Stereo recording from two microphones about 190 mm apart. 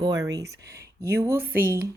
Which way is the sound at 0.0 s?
20° right (ahead or behind).